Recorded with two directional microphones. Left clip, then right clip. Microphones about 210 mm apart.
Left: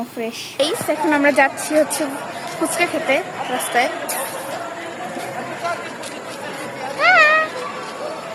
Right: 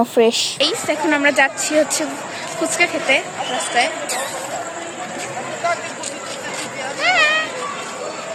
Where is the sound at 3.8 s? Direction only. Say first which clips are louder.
Even; 30° left (ahead or behind).